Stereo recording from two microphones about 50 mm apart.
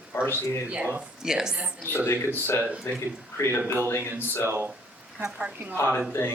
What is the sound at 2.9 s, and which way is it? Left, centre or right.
Speech, left.